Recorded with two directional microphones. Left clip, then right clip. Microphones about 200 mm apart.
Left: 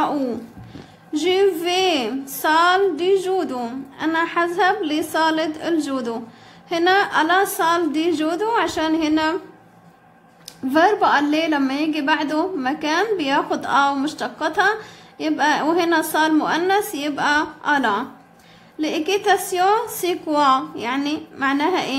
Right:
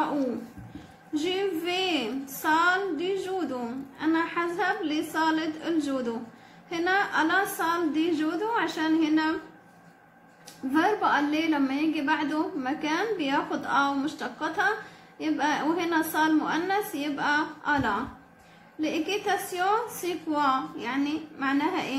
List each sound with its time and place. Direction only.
1.2 s a woman's voice: 40° left (ahead or behind)
10.7 s a woman's voice: 40° left (ahead or behind)